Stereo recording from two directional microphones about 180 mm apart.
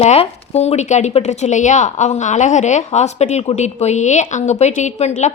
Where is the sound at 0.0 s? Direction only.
35° left (ahead or behind).